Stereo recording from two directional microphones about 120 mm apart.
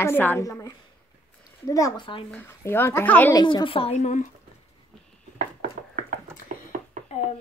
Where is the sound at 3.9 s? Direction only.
80° left.